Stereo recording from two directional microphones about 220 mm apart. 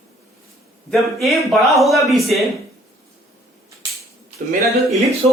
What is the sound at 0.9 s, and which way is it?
A man's voice, centre (ahead or behind).